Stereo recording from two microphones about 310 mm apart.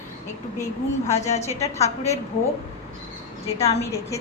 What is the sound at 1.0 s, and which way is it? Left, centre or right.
A woman's voice, left.